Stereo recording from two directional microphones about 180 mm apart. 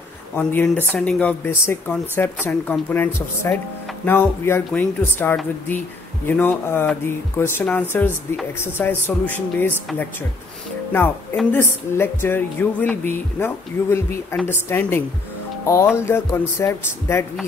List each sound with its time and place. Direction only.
0.4 s speech: 10° left (ahead or behind)
11.5 s speech: 15° left (ahead or behind)